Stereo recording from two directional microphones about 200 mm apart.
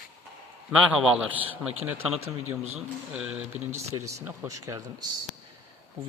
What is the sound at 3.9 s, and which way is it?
Speech, 20° right (ahead or behind).